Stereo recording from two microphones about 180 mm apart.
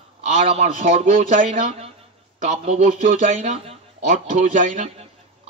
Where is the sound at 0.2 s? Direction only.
40° right (ahead or behind).